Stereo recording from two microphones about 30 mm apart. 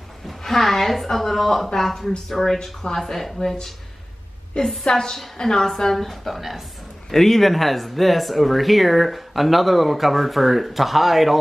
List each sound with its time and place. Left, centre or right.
0.4 s a woman's voice: centre
4.8 s a woman's voice: left
5.1 s a woman's voice: centre
6.0 s speech: centre
7.1 s speech: centre